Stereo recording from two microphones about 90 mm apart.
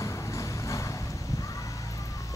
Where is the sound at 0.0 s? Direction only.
35° left (ahead or behind).